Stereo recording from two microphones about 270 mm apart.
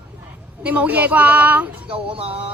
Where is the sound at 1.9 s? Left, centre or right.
Centre.